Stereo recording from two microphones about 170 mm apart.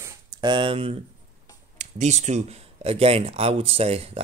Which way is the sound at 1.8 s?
45° right (ahead or behind).